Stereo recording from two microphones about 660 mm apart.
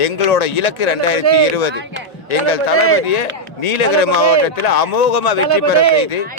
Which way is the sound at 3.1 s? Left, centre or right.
Left.